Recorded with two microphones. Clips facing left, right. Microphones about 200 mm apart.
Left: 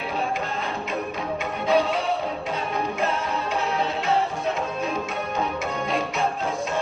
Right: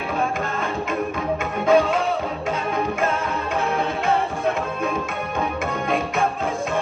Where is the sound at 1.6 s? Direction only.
50° right (ahead or behind).